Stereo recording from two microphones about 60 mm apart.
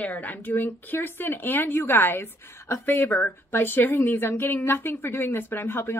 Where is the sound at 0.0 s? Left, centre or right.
Left.